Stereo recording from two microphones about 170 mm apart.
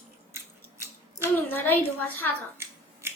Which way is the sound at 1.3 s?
10° left (ahead or behind).